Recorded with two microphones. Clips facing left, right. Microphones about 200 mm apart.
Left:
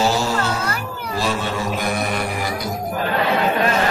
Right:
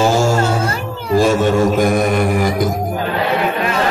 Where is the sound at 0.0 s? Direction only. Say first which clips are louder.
Right 6 dB; 50° right (ahead or behind).